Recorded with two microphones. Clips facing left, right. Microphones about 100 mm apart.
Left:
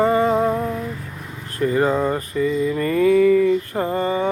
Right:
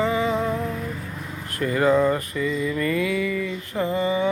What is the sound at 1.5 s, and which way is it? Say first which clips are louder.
Mantra: left 1 dB; 30° left (ahead or behind).